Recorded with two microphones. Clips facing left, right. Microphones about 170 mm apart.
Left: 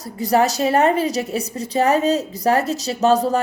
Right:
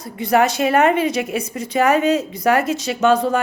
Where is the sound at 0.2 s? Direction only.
40° left (ahead or behind).